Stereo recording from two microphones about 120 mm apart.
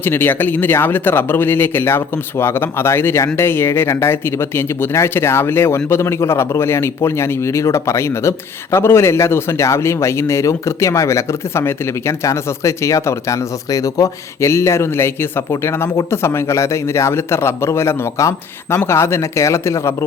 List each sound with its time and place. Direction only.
0.0 s speech: 15° left (ahead or behind)